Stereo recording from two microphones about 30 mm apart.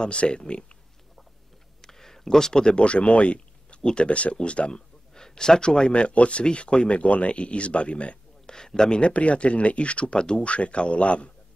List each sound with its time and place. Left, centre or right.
0.0 s speech: left
1.8 s a sound: centre
2.7 s speech: left
5.1 s a man's voice: left
8.5 s speech: left
9.0 s speech: left
10.1 s speech: left
10.4 s speech: left